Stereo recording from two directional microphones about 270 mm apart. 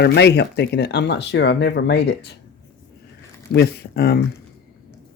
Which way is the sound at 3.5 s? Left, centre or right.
Left.